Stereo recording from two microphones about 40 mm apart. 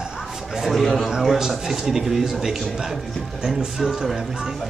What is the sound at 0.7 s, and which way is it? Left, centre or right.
Speech, centre.